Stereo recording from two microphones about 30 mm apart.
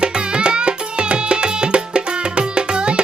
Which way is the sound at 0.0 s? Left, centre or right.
Right.